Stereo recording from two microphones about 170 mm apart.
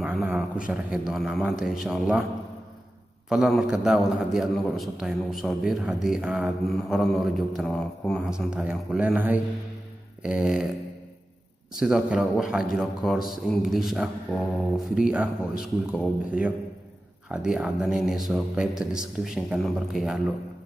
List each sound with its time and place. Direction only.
0.0 s a sound: 5° right (ahead or behind)
0.7 s a man's voice: 5° right (ahead or behind)
3.3 s a man's voice: centre (ahead or behind)
11.7 s a man's voice: 5° right (ahead or behind)